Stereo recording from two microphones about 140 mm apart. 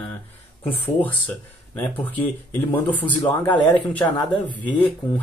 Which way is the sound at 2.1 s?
15° left (ahead or behind).